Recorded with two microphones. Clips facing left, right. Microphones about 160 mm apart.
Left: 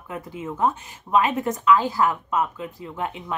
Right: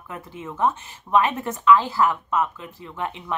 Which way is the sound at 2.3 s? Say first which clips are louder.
Even; 20° left (ahead or behind).